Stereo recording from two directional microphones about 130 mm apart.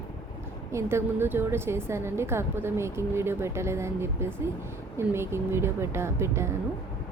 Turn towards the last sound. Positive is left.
turn(degrees=-20)  # may be behind; listen again after turning